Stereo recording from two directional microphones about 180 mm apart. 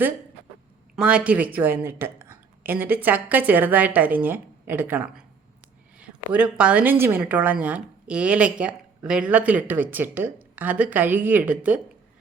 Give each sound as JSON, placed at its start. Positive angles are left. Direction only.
{"t": 0.9, "sound": "speech", "side_deg": -5}
{"t": 6.3, "sound": "speech", "side_deg": -5}